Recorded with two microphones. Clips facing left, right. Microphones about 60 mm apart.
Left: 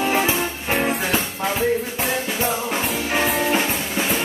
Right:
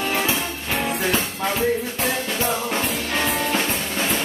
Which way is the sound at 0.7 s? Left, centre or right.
Left.